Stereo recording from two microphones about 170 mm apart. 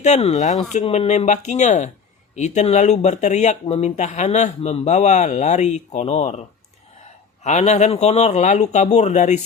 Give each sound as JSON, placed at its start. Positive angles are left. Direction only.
{"t": 0.0, "sound": "speech", "side_deg": 40}
{"t": 7.4, "sound": "speech", "side_deg": 40}